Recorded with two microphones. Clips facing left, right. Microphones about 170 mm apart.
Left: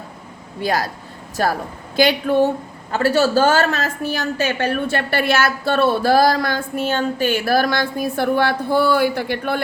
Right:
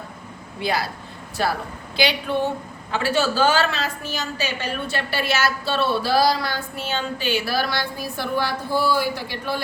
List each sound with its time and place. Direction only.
0.6 s a woman's voice: 45° left (ahead or behind)